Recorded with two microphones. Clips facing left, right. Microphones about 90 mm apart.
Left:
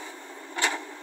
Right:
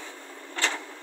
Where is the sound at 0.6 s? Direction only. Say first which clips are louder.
Left 1 dB; 15° left (ahead or behind).